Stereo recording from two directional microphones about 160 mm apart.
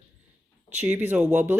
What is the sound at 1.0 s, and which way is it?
Speech, 10° right (ahead or behind).